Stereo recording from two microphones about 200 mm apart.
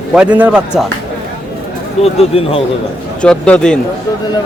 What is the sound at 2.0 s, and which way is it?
Speech, 30° left (ahead or behind).